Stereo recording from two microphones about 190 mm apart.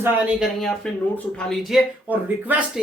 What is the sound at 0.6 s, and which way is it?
Speech, 5° left (ahead or behind).